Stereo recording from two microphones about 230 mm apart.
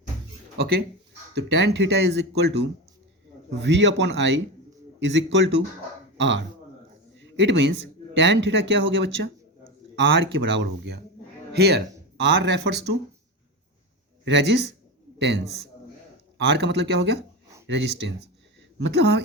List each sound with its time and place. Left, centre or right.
0.5 s speech: right
7.2 s a sound: right
8.1 s speech: right
14.3 s speech: right
16.5 s speech: right